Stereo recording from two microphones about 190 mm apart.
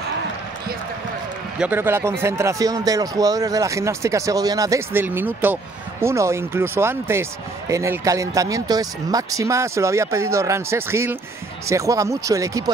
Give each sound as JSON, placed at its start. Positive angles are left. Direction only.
{"t": 1.6, "sound": "a man's voice", "side_deg": -10}